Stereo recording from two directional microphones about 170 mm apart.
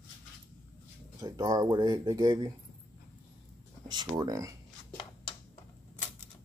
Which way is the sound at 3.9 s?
25° right (ahead or behind).